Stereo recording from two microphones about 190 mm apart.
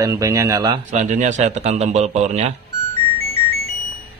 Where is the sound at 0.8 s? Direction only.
40° right (ahead or behind).